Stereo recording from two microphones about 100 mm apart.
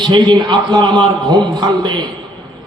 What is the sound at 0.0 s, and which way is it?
Speech, 50° right (ahead or behind).